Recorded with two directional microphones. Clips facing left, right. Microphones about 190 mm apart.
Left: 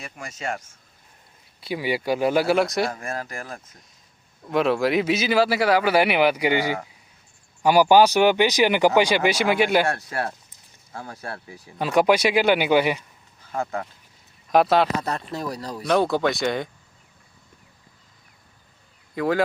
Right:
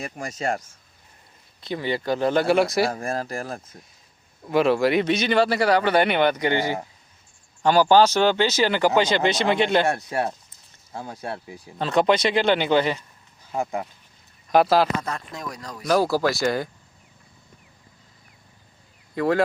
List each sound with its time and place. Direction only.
0.0 s speech: 40° right (ahead or behind)
1.6 s speech: 10° left (ahead or behind)
2.9 s speech: 35° right (ahead or behind)
4.4 s speech: centre (ahead or behind)
10.1 s speech: 20° right (ahead or behind)
11.8 s speech: 10° left (ahead or behind)
13.5 s speech: 15° right (ahead or behind)
14.5 s speech: centre (ahead or behind)
15.0 s speech: 35° left (ahead or behind)
15.9 s speech: centre (ahead or behind)
19.1 s speech: centre (ahead or behind)